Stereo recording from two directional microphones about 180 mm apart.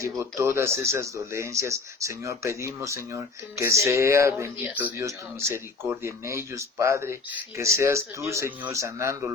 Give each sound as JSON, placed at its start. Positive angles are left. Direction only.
{"t": 0.0, "sound": "speech", "side_deg": -15}